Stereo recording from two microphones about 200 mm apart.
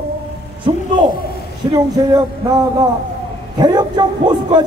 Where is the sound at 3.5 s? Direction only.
20° right (ahead or behind).